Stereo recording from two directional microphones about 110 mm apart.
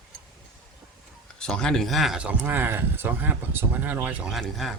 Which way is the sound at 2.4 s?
20° right (ahead or behind).